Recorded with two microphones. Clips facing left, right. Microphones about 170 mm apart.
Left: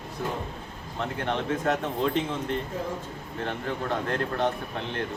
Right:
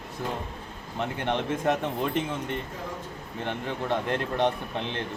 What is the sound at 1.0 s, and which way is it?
Speech, 15° right (ahead or behind).